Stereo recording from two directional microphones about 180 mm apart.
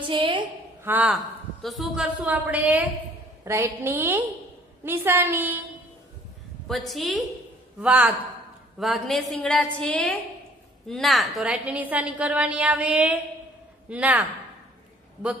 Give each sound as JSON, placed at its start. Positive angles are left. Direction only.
{"t": 0.0, "sound": "a sound", "side_deg": -25}
{"t": 0.8, "sound": "a woman's voice", "side_deg": -10}
{"t": 6.7, "sound": "a woman's voice", "side_deg": 0}